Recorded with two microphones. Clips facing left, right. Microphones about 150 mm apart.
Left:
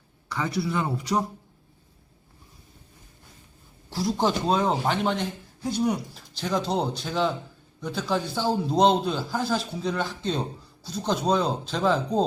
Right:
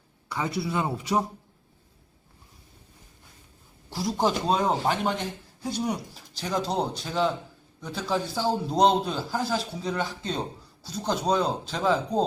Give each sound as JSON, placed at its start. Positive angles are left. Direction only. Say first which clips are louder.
{"t": 0.3, "sound": "speech", "louder": "left 1 dB", "side_deg": -20}
{"t": 3.8, "sound": "a man's voice", "louder": "left 1 dB", "side_deg": -5}